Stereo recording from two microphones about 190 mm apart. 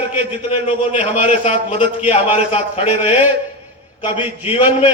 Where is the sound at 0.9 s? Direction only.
35° left (ahead or behind).